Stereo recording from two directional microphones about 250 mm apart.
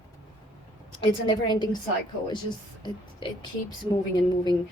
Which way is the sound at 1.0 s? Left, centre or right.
Centre.